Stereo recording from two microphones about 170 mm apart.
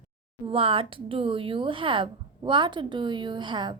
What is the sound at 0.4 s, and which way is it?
A woman's voice, 35° right (ahead or behind).